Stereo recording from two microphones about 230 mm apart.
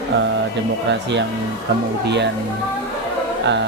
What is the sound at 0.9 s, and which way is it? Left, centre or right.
Speech, right.